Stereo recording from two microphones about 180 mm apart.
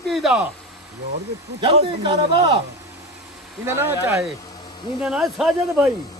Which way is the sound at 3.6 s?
15° right (ahead or behind).